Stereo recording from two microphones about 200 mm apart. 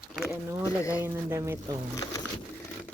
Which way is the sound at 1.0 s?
10° right (ahead or behind).